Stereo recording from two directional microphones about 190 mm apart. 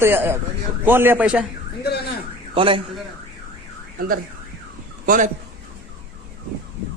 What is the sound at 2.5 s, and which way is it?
Speech, 25° right (ahead or behind).